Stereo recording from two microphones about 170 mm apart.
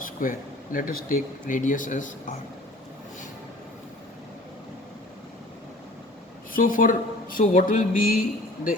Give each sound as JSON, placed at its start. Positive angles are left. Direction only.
{"t": 0.0, "sound": "speech", "side_deg": 55}
{"t": 6.5, "sound": "speech", "side_deg": 55}